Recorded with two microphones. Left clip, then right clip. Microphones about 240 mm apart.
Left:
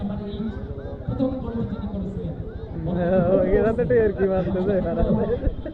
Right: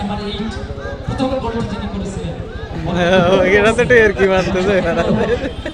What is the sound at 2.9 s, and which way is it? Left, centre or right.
A man's voice, right.